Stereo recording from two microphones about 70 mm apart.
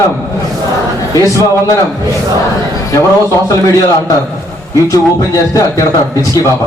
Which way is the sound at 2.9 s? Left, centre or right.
Left.